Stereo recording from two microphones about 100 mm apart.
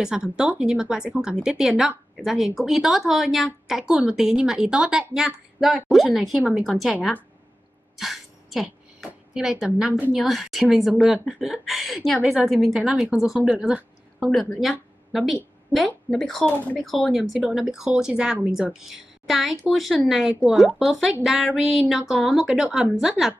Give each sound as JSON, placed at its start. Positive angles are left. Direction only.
{"t": 0.0, "sound": "a woman's voice", "side_deg": -10}
{"t": 8.0, "sound": "throat clearing", "side_deg": 0}
{"t": 9.0, "sound": "speech", "side_deg": -5}
{"t": 10.1, "sound": "a woman's voice", "side_deg": 0}